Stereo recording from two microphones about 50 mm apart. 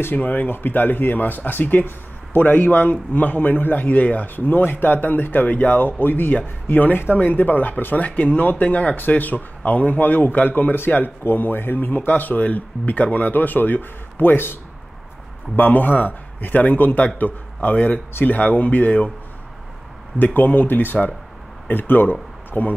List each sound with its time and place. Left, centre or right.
0.0 s speech: left
20.2 s speech: left